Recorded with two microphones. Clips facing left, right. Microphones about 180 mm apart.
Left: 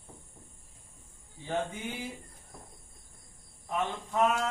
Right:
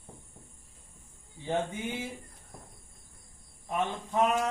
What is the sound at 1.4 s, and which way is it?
Speech, 20° right (ahead or behind).